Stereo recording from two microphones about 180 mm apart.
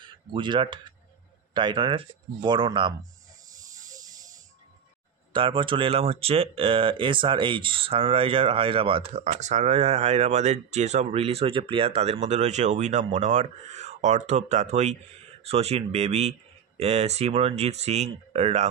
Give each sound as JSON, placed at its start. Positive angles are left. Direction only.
{"t": 0.0, "sound": "speech", "side_deg": -25}
{"t": 5.3, "sound": "speech", "side_deg": -30}
{"t": 9.2, "sound": "speech", "side_deg": -40}